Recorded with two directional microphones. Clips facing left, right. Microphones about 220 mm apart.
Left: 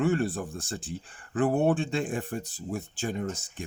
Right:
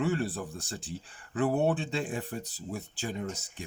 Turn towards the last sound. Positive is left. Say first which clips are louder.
# left 3 dB
turn(degrees=50)  # may be behind; listen again after turning